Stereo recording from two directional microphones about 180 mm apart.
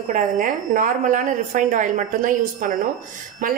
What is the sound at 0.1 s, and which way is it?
A woman's voice, 50° right (ahead or behind).